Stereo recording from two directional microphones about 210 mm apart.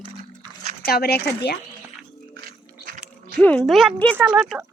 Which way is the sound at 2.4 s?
45° right (ahead or behind).